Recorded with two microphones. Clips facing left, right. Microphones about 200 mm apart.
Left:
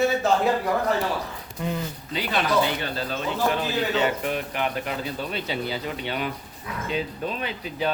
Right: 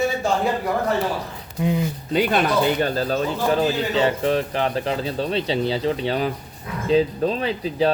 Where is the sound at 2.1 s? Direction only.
45° right (ahead or behind).